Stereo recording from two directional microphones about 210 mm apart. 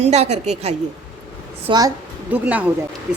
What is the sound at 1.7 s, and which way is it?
Speech, 20° right (ahead or behind).